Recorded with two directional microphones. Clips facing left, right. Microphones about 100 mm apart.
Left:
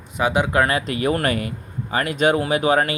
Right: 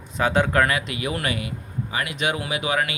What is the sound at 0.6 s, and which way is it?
Speech, 40° left (ahead or behind).